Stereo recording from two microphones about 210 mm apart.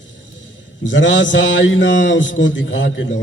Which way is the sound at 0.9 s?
60° left (ahead or behind).